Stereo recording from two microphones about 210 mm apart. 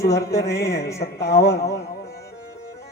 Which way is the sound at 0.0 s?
15° left (ahead or behind).